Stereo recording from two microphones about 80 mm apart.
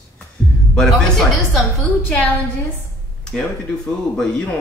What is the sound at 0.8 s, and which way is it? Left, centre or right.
Speech, centre.